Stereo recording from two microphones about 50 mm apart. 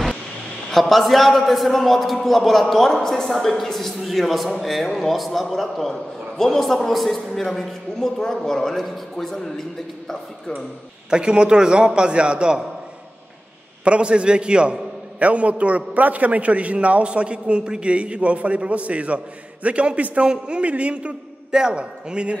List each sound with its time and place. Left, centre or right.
0.7 s a man's voice: centre
11.1 s a man's voice: centre
13.8 s a man's voice: right